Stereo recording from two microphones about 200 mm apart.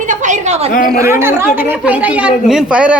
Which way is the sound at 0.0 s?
40° right (ahead or behind).